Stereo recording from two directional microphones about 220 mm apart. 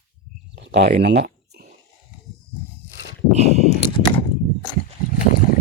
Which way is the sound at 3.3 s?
30° right (ahead or behind).